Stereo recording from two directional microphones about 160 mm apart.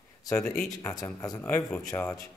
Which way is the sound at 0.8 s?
20° left (ahead or behind).